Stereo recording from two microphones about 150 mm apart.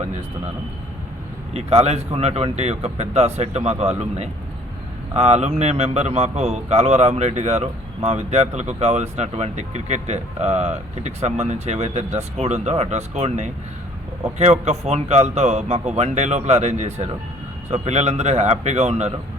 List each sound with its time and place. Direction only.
1.5 s a man's voice: 45° right (ahead or behind)